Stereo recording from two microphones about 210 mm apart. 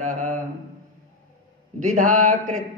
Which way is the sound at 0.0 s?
35° right (ahead or behind).